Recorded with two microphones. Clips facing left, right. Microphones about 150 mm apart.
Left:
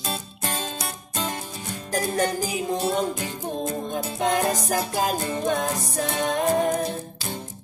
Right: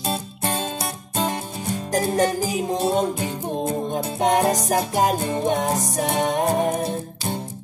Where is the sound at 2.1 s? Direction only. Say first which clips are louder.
Right 3 dB; 20° right (ahead or behind).